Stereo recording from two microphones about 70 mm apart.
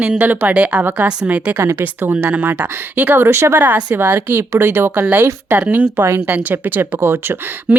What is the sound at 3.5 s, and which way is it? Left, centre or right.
Speech, right.